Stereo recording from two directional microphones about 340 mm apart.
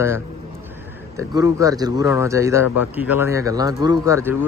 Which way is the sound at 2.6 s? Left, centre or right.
Left.